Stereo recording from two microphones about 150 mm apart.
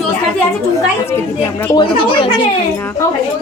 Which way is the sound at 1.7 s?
35° left (ahead or behind).